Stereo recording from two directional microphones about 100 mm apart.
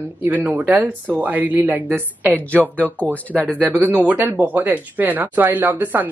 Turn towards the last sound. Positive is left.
turn(degrees=-20)  # may be behind; listen again after turning